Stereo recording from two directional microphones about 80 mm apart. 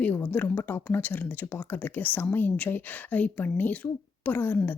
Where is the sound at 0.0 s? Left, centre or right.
Left.